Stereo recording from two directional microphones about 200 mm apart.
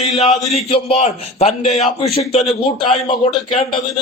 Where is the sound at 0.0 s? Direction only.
30° left (ahead or behind).